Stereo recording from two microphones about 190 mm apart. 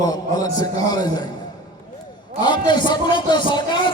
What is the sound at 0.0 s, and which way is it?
A man's voice, 20° left (ahead or behind).